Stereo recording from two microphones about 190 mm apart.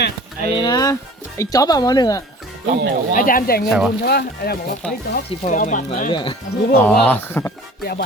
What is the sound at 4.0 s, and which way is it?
Speech, 55° left (ahead or behind).